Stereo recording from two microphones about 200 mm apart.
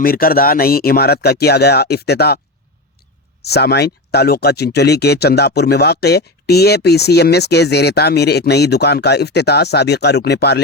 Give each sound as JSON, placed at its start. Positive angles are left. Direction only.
{"t": 0.0, "sound": "speech", "side_deg": 50}
{"t": 3.4, "sound": "speech", "side_deg": 55}